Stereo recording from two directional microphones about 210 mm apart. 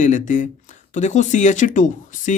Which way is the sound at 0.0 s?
40° left (ahead or behind).